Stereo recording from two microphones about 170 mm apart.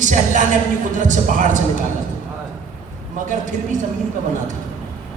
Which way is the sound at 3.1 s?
50° right (ahead or behind).